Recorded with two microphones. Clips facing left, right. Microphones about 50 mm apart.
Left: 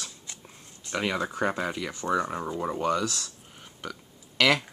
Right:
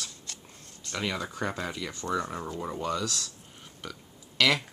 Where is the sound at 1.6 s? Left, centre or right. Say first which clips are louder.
Left 4 dB; centre.